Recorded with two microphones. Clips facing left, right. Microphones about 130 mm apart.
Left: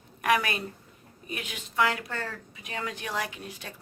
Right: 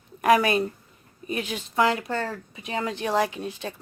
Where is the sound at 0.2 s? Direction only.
30° right (ahead or behind).